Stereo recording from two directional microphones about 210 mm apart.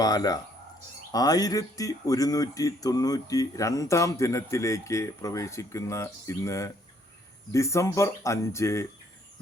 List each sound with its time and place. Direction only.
0.0 s speech: 20° left (ahead or behind)